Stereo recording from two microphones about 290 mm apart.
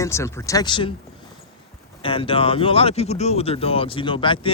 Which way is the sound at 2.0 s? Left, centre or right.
Centre.